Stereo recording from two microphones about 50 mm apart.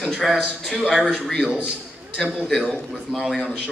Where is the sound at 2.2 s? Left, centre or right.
Centre.